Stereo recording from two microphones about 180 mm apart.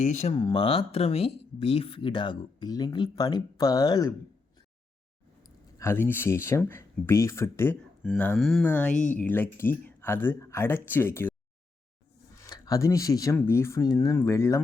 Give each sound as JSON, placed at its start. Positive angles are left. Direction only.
{"t": 0.0, "sound": "speech", "side_deg": 40}
{"t": 0.3, "sound": "speech", "side_deg": 25}
{"t": 5.4, "sound": "speech", "side_deg": 15}
{"t": 12.4, "sound": "speech", "side_deg": 20}